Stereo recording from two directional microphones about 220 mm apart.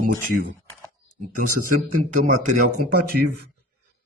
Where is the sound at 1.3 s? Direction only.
35° right (ahead or behind).